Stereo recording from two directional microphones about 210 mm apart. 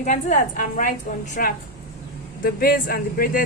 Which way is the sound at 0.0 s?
35° left (ahead or behind).